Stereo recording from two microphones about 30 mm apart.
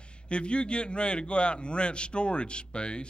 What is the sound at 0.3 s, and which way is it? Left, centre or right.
A man's voice, left.